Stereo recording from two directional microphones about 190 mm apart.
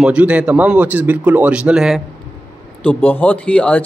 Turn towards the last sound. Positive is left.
turn(degrees=5)  # may be behind; listen again after turning